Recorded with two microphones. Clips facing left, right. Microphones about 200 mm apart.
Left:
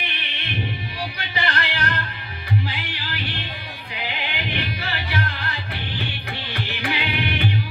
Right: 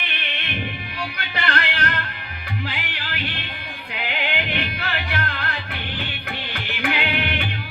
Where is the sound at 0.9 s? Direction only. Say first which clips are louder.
Even; 60° right (ahead or behind).